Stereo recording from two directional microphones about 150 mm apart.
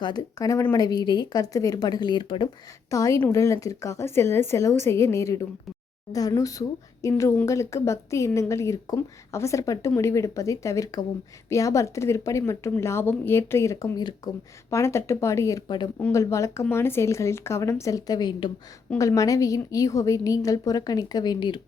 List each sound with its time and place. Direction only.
0.0 s a woman's voice: 30° left (ahead or behind)